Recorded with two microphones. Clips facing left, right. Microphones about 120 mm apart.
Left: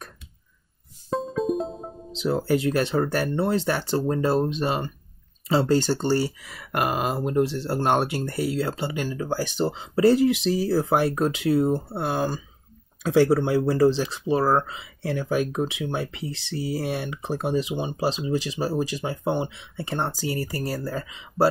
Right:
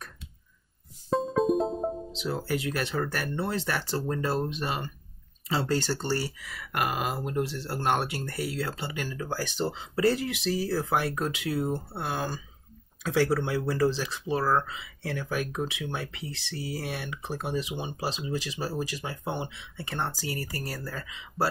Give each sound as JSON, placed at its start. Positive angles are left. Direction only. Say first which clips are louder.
{"t": 1.1, "sound": "music", "louder": "right 1 dB", "side_deg": 0}
{"t": 2.2, "sound": "speech", "louder": "left 8 dB", "side_deg": 30}